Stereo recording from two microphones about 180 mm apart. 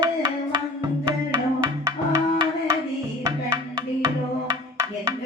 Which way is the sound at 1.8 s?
20° right (ahead or behind).